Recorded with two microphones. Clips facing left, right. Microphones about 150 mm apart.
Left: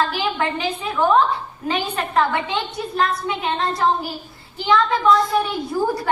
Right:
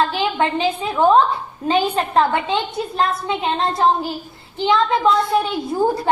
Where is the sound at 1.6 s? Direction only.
25° right (ahead or behind).